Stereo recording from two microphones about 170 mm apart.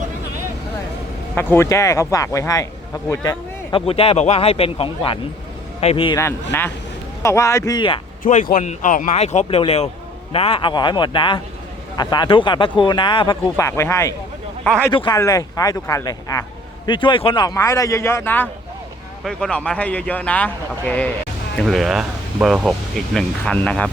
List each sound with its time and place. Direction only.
1.4 s speech: 15° left (ahead or behind); by 6.1 s 35° left (ahead or behind)
6.1 s speech: 15° left (ahead or behind)
8.2 s speech: 50° left (ahead or behind); by 23.9 s 5° left (ahead or behind)